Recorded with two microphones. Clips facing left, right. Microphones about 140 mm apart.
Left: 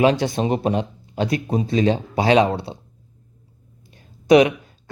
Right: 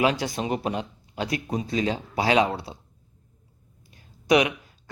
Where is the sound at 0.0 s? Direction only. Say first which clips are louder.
Left 6 dB; 25° left (ahead or behind).